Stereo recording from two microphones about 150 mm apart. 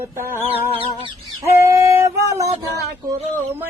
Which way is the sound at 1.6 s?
20° right (ahead or behind).